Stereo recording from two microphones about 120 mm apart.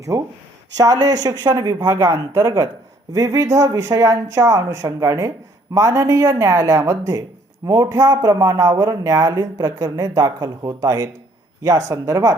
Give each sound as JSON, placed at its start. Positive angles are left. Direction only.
{"t": 0.8, "sound": "speech", "side_deg": -30}